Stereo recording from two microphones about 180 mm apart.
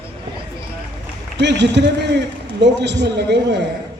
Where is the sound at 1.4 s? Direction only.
75° right (ahead or behind).